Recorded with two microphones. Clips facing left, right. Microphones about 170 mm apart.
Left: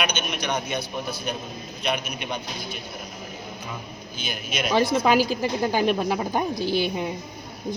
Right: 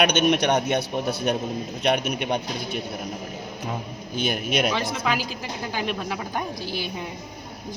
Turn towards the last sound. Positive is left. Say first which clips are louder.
# left 6 dB
turn(degrees=25)  # may be behind; listen again after turning